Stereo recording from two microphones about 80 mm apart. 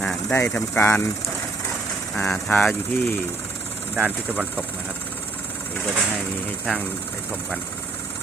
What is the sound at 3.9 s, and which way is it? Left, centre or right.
Speech, centre.